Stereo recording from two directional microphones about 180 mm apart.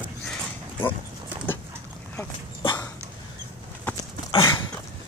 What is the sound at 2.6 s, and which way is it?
Dog, 25° left (ahead or behind).